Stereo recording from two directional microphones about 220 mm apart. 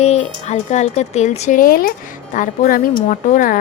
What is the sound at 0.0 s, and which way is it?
Speech, 30° left (ahead or behind).